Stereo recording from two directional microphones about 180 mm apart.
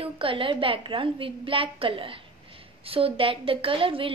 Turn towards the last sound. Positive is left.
turn(degrees=-30)  # may be behind; listen again after turning